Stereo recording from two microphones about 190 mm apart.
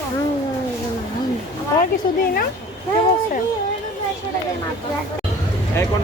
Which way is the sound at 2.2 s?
50° left (ahead or behind).